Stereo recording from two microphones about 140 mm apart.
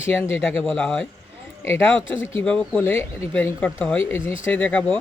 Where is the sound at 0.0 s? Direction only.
15° left (ahead or behind).